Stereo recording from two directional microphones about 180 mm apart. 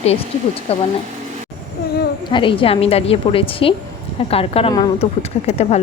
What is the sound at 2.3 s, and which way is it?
Speech, 30° left (ahead or behind).